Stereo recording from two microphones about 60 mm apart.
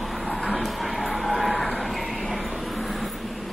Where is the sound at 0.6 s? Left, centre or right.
Centre.